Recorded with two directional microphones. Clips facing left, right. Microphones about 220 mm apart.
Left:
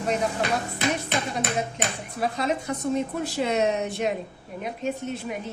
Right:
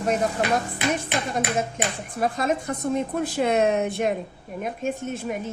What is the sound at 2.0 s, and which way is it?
Speech, 50° right (ahead or behind).